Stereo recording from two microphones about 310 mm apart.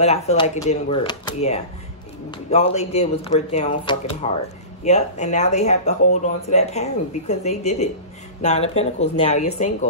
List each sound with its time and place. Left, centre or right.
0.0 s speech: left